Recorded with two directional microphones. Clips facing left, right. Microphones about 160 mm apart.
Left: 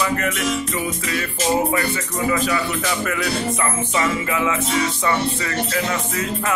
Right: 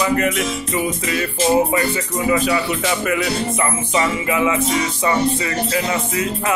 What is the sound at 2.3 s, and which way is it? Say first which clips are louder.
Speech: right 4 dB; 20° right (ahead or behind).